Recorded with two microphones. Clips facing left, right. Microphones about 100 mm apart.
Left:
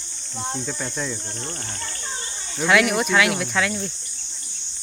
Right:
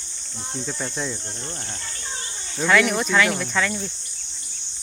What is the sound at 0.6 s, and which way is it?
Speech, 5° right (ahead or behind).